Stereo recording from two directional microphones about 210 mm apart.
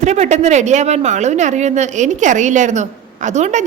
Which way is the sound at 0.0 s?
35° right (ahead or behind).